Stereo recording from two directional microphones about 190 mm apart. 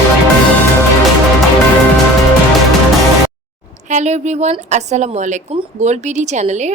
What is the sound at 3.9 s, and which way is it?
A woman's voice, 40° right (ahead or behind).